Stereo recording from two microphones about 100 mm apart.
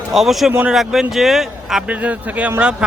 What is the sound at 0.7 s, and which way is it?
A man's voice, centre (ahead or behind).